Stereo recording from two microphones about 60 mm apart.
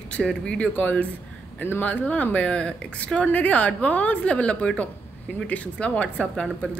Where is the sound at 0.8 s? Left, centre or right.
Left.